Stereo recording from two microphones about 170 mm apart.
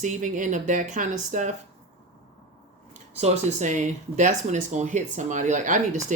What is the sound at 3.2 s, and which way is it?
Speech, 45° right (ahead or behind).